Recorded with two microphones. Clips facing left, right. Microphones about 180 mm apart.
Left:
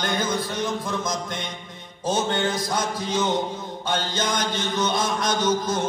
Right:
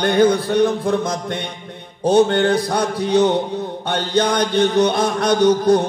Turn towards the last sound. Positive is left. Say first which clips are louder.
# right 9 dB
turn(degrees=-65)  # may be behind; listen again after turning